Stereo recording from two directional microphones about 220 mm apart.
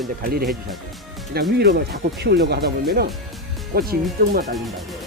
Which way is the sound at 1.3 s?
45° right (ahead or behind).